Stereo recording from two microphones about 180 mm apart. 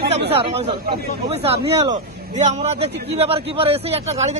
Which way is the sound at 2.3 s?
40° right (ahead or behind).